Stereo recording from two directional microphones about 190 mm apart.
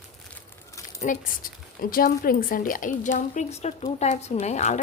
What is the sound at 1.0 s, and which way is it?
Speech, 40° left (ahead or behind).